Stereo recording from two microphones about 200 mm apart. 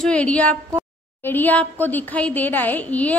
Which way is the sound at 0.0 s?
5° left (ahead or behind).